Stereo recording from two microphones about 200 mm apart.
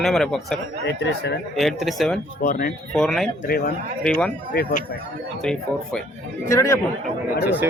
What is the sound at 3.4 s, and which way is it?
Speech, 50° left (ahead or behind).